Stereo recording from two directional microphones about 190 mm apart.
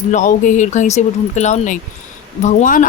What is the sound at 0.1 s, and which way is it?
Speech, 40° left (ahead or behind).